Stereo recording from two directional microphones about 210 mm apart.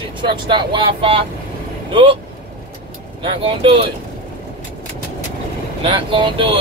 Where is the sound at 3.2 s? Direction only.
25° right (ahead or behind).